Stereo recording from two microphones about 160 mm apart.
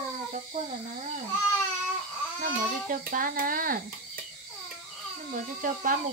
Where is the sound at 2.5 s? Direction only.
60° right (ahead or behind).